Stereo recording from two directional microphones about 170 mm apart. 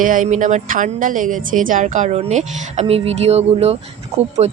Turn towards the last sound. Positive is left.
turn(degrees=-40)  # may be behind; listen again after turning